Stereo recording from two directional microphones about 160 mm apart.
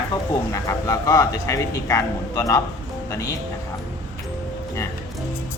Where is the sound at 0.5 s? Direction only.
20° left (ahead or behind).